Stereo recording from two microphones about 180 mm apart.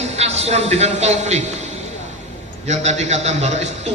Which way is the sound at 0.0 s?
35° right (ahead or behind).